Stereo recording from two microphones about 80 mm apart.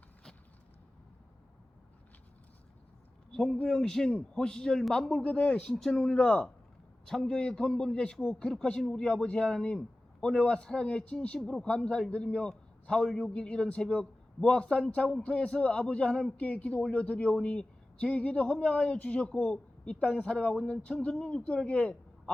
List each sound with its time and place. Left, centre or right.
3.3 s a man's voice: centre
5.7 s a man's voice: centre